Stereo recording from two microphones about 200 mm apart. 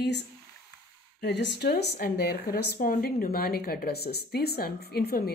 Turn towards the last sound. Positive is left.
turn(degrees=50)  # may be behind; listen again after turning